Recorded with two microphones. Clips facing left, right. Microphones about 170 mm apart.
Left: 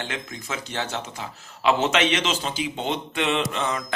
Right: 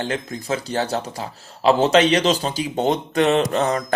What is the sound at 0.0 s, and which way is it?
Speech, 35° right (ahead or behind).